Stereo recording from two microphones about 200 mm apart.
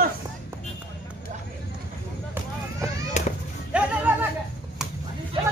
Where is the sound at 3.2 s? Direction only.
35° left (ahead or behind).